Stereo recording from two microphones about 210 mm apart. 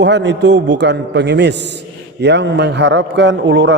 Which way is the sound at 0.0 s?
55° right (ahead or behind).